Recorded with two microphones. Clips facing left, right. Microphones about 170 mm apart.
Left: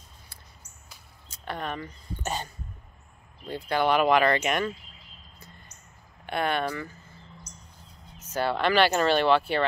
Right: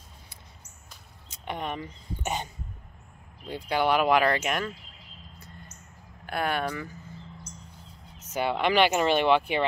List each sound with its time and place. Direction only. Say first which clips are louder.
1.3 s speech: even; 15° right (ahead or behind)
6.2 s speech: left 1 dB; 5° right (ahead or behind)
8.3 s speech: even; 15° right (ahead or behind)